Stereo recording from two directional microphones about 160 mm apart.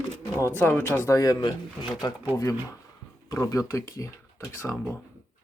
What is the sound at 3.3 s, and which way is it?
Speech, 20° left (ahead or behind).